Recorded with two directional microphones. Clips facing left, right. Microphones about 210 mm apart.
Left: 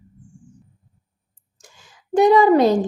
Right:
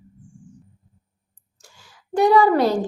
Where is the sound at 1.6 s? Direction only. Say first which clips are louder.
Left 5 dB; 20° left (ahead or behind).